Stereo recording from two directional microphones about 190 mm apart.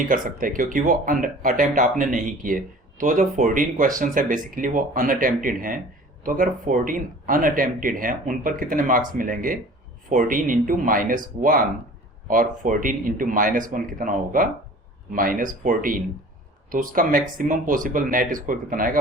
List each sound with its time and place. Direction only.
0.0 s speech: 45° right (ahead or behind)